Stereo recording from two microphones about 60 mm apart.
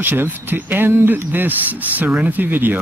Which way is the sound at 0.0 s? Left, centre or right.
Right.